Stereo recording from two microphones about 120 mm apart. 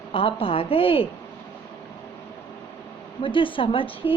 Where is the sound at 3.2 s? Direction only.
45° left (ahead or behind).